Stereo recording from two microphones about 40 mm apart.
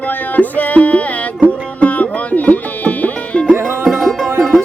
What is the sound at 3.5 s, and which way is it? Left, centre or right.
Music, right.